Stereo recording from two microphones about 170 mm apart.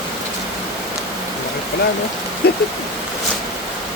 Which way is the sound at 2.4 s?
70° left (ahead or behind).